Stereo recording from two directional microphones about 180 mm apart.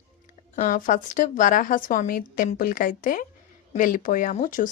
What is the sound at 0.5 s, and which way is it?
Speech, 45° left (ahead or behind).